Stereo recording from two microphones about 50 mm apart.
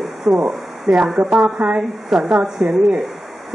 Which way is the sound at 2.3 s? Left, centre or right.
Centre.